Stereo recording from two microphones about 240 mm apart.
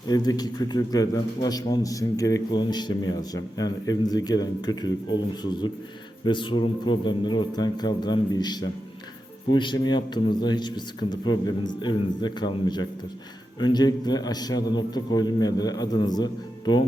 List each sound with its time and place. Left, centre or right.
0.1 s a man's voice: centre